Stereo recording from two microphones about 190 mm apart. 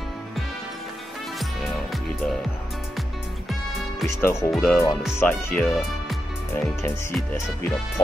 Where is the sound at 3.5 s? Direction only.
Centre (ahead or behind).